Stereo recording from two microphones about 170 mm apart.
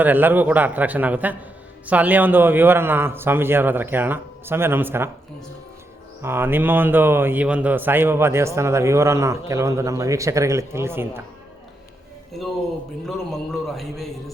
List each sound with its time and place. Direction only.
0.0 s speech: 10° right (ahead or behind)
6.2 s speech: 15° right (ahead or behind)
13.1 s speech: centre (ahead or behind)